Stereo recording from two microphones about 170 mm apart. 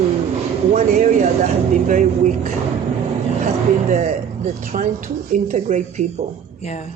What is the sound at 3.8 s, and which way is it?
Speech, 40° right (ahead or behind).